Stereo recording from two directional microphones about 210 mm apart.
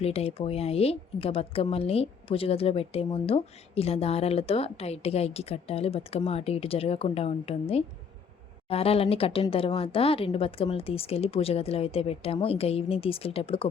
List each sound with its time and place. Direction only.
0.0 s speech: 30° left (ahead or behind)